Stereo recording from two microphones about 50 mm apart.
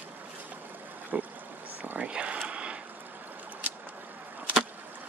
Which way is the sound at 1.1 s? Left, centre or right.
Right.